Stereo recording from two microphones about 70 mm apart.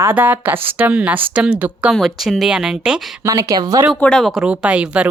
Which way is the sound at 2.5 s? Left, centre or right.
Centre.